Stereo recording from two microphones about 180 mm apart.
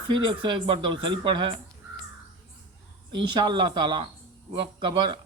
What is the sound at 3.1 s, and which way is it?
Speech, 25° right (ahead or behind).